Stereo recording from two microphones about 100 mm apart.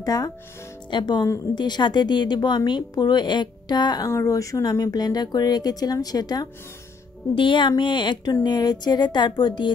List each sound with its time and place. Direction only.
0.0 s speech: 40° left (ahead or behind)
0.8 s speech: 50° left (ahead or behind)
4.1 s speech: 30° left (ahead or behind)
7.3 s speech: 55° left (ahead or behind)